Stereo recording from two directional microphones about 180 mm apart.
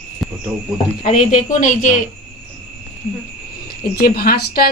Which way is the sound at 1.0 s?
45° left (ahead or behind).